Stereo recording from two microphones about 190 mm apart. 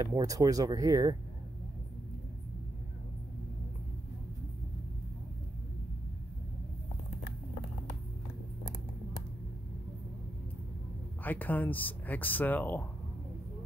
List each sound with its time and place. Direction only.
0.0 s speech: 15° right (ahead or behind)
11.2 s speech: 10° left (ahead or behind)